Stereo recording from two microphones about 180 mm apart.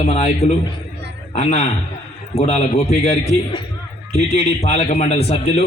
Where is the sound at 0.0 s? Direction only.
35° left (ahead or behind).